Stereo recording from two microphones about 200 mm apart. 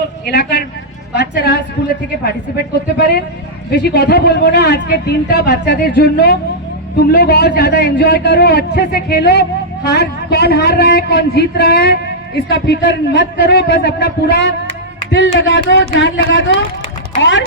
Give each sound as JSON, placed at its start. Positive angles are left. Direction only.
{"t": 0.3, "sound": "speech", "side_deg": 55}
{"t": 3.7, "sound": "a man's voice", "side_deg": 50}